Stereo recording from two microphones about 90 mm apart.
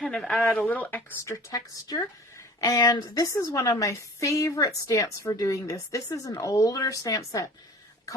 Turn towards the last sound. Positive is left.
turn(degrees=40)  # may be behind; listen again after turning